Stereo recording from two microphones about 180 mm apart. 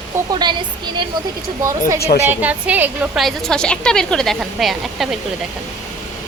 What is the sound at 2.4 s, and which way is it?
Speech, 10° right (ahead or behind).